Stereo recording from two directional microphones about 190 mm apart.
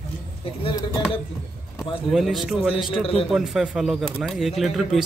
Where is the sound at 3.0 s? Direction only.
30° left (ahead or behind).